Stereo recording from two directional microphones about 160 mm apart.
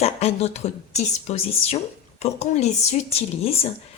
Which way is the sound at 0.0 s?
40° left (ahead or behind).